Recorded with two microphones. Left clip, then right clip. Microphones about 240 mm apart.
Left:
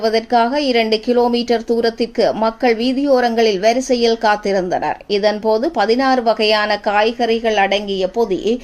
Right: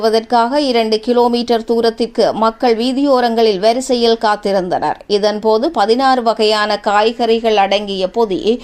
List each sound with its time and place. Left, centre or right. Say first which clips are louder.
0.0 s speech: right 2 dB; centre